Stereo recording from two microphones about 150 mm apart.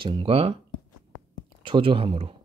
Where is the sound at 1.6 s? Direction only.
35° right (ahead or behind).